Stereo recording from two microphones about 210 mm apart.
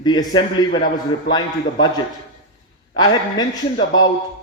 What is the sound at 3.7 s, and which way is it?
Speech, 65° left (ahead or behind).